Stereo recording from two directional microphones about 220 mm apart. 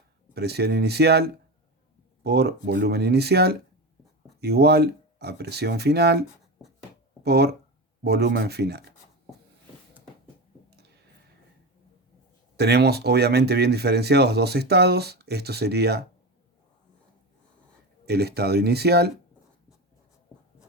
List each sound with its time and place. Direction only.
0.3 s speech: 45° right (ahead or behind)
7.2 s speech: 45° right (ahead or behind)
10.7 s a sound: 45° right (ahead or behind)
12.5 s speech: 50° right (ahead or behind)
18.0 s speech: 45° right (ahead or behind)